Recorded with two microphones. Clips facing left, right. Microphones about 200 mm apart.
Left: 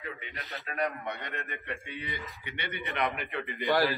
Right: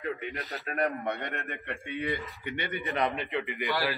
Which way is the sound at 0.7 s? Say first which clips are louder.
Right 3 dB; 55° right (ahead or behind).